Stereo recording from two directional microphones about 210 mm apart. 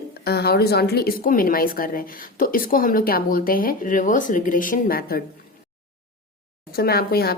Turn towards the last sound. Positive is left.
turn(degrees=45)  # may be behind; listen again after turning